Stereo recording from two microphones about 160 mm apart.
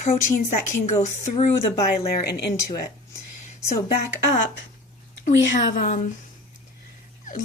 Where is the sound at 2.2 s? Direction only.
90° left.